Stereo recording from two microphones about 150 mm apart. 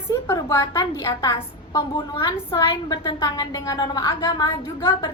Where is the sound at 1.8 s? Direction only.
35° left (ahead or behind).